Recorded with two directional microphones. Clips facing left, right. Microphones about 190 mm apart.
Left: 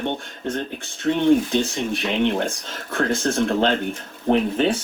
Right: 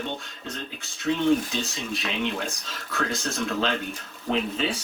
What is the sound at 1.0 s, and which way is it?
Speech, 55° left (ahead or behind).